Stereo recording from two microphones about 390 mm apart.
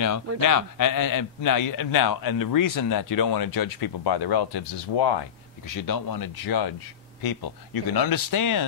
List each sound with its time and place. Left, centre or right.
0.0 s a man's voice: left
5.8 s a man's voice: left